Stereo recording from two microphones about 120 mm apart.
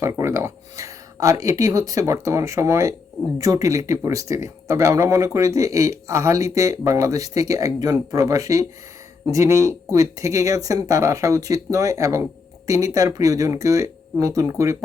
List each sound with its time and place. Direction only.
0.0 s speech: 20° right (ahead or behind)